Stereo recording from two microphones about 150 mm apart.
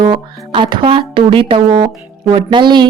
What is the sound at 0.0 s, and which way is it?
Speech, 35° right (ahead or behind).